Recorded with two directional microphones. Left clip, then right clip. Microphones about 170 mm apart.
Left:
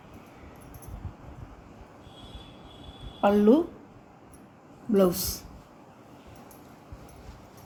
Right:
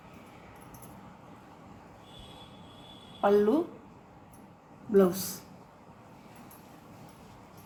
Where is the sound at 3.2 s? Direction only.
40° left (ahead or behind).